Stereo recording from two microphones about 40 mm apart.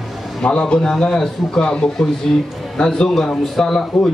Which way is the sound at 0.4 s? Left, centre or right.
Left.